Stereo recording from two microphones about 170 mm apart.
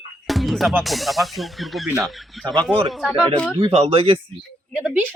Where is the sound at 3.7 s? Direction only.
35° right (ahead or behind).